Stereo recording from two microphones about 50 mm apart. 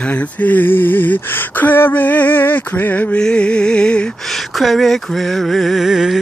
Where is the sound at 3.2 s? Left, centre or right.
Centre.